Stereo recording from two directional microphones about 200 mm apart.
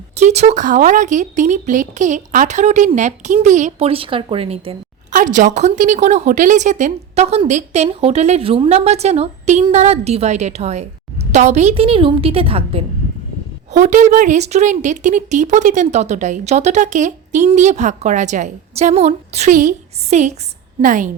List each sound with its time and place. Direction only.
0.2 s a woman's voice: 35° right (ahead or behind)
13.7 s speech: 40° right (ahead or behind)